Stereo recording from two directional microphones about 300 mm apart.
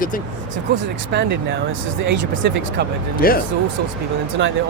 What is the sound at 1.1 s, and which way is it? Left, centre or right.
Speech, right.